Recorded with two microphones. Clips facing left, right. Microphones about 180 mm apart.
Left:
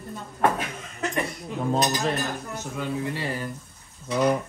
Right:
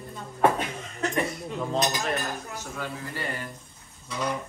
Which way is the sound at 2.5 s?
20° left (ahead or behind).